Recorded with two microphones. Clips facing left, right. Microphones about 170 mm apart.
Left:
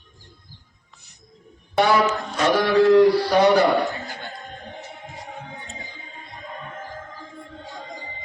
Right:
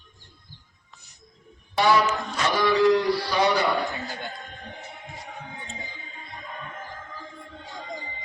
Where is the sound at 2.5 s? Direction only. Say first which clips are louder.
Left 5 dB; 55° left (ahead or behind).